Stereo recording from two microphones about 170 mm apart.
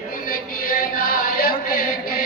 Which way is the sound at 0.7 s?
60° left (ahead or behind).